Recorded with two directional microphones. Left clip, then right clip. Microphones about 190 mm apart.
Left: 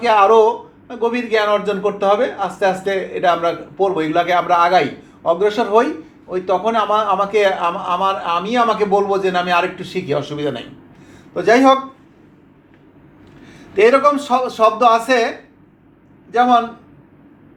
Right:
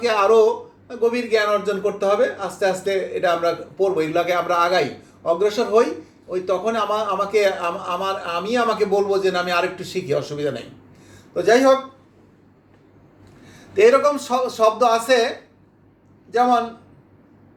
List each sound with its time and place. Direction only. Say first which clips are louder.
0.0 s a man's voice: left 4 dB; 25° right (ahead or behind)
13.7 s a man's voice: left 3 dB; 25° right (ahead or behind)
16.3 s a man's voice: left 4 dB; 20° right (ahead or behind)